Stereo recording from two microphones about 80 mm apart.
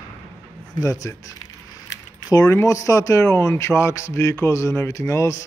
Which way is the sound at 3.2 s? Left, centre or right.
Left.